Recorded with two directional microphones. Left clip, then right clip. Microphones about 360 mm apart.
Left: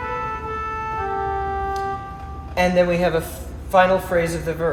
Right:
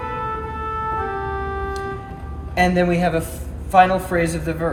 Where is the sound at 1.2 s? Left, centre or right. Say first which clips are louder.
Left 2 dB; right.